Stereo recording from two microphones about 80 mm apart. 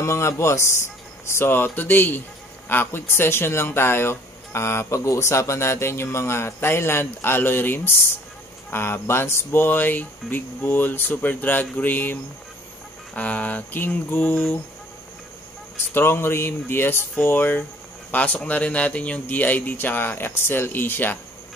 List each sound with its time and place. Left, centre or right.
0.0 s speech: left
15.9 s speech: left